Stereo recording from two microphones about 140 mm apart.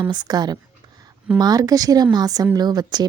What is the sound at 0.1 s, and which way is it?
A woman's voice, 30° right (ahead or behind).